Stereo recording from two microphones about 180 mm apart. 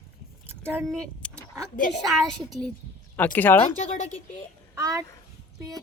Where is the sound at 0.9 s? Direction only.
5° left (ahead or behind).